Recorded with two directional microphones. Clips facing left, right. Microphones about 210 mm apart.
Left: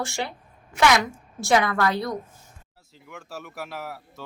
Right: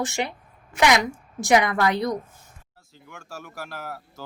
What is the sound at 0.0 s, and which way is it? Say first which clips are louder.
Speech: right 3 dB; 20° right (ahead or behind).